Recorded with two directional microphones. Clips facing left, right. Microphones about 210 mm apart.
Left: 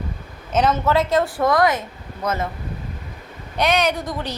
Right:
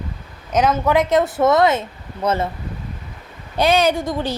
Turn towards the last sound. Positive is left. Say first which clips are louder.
# right 4 dB
turn(degrees=-25)  # may be behind; listen again after turning